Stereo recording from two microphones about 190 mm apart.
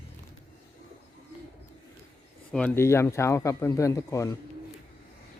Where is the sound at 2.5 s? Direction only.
5° left (ahead or behind).